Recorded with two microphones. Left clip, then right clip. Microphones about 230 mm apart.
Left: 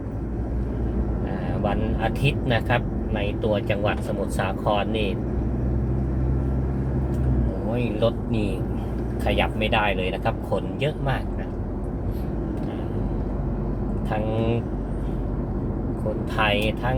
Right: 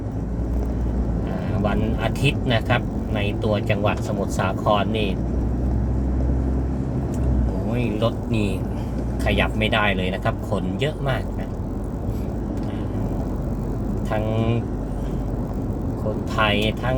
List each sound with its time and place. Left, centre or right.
1.6 s speech: centre
9.2 s speech: centre
16.4 s speech: centre